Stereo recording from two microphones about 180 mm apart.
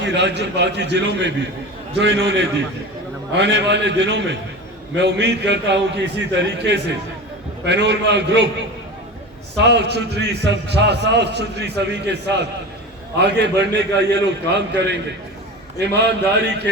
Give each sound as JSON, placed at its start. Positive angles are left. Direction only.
{"t": 0.0, "sound": "a man's voice", "side_deg": -70}
{"t": 3.3, "sound": "a man's voice", "side_deg": -75}
{"t": 9.6, "sound": "a man's voice", "side_deg": -70}
{"t": 16.0, "sound": "a man's voice", "side_deg": -70}